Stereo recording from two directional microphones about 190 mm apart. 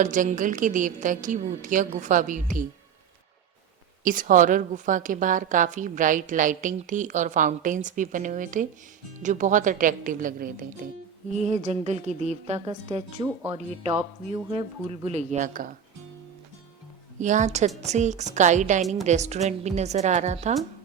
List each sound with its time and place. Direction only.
0.0 s a woman's voice: 45° right (ahead or behind)
4.0 s a woman's voice: 45° right (ahead or behind)
11.3 s a woman's voice: 40° right (ahead or behind)
14.3 s speech: 30° right (ahead or behind)
17.2 s speech: 40° right (ahead or behind)